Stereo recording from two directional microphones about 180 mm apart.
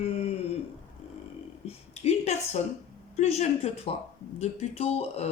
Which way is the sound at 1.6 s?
35° left (ahead or behind).